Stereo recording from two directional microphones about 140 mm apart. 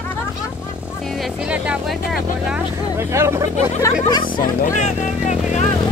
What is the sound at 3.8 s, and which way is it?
Speech, 30° left (ahead or behind).